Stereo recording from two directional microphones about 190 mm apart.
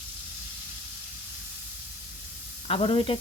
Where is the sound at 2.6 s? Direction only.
30° left (ahead or behind).